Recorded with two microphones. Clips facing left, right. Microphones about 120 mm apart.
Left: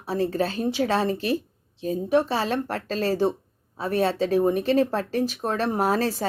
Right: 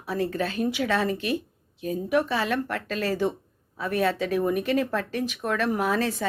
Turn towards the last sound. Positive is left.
turn(degrees=35)  # may be behind; listen again after turning